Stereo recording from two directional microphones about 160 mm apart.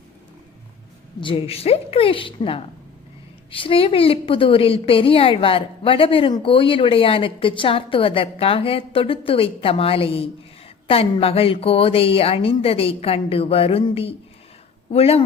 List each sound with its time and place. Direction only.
1.2 s a woman's voice: 35° left (ahead or behind)